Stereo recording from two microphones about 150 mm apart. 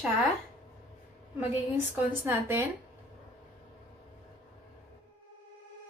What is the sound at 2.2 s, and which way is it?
Speech, 15° right (ahead or behind).